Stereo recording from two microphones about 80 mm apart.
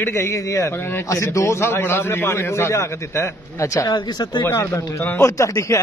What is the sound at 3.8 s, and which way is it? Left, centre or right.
Speech, left.